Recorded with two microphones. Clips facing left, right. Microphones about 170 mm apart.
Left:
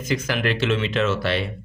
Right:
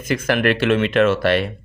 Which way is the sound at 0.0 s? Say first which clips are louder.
Right 5 dB; 55° right (ahead or behind).